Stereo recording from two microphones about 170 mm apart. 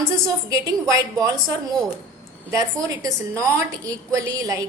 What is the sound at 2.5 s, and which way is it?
A woman's voice, 20° right (ahead or behind).